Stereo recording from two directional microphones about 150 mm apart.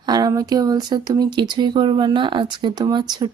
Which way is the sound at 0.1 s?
25° right (ahead or behind).